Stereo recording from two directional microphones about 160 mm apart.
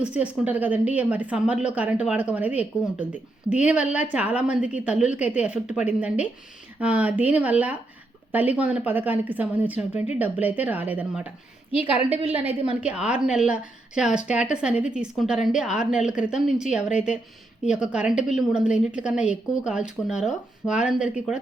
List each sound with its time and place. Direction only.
0.0 s speech: 10° right (ahead or behind)
12.8 s a woman's voice: 5° right (ahead or behind)